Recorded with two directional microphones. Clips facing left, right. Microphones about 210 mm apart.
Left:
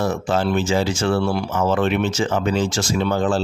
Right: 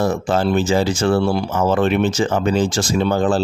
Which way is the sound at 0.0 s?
35° right (ahead or behind).